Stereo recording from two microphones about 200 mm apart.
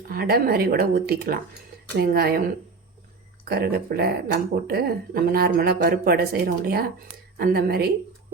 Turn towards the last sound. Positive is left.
turn(degrees=-50)  # may be behind; listen again after turning